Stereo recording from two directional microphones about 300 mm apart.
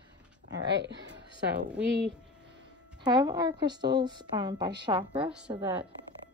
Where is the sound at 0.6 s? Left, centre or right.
Right.